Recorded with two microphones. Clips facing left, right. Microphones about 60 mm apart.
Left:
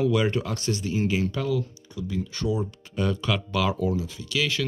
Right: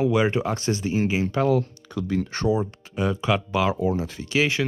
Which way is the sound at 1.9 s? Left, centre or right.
Right.